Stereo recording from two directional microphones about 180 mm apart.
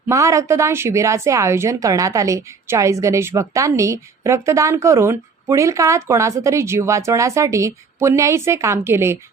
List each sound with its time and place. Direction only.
0.1 s a woman's voice: 15° right (ahead or behind)